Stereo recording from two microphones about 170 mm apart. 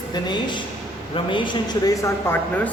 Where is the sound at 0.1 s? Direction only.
25° left (ahead or behind).